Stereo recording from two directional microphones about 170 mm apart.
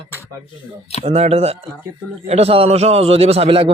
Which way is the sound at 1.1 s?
40° right (ahead or behind).